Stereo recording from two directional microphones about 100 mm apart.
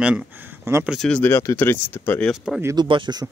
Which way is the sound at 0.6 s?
25° right (ahead or behind).